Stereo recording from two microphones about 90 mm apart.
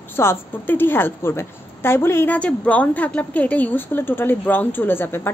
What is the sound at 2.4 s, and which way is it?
A woman's voice, 15° left (ahead or behind).